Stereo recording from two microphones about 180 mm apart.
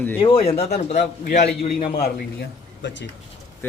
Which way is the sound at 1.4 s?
65° left (ahead or behind).